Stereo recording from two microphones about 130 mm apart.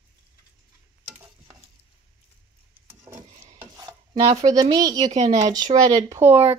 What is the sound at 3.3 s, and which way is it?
Stir, 65° right (ahead or behind).